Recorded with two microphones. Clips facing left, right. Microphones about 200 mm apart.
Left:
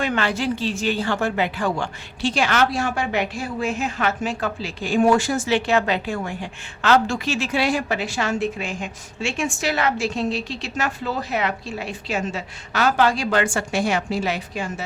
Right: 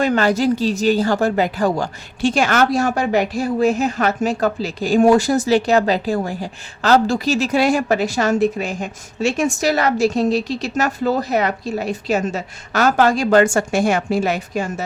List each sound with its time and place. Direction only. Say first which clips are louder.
0.0 s speech: right 7 dB; 40° right (ahead or behind)